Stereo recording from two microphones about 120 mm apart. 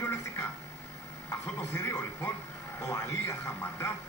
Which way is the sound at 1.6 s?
20° left (ahead or behind).